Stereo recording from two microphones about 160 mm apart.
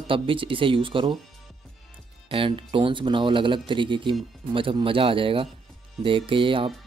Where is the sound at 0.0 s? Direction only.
35° right (ahead or behind).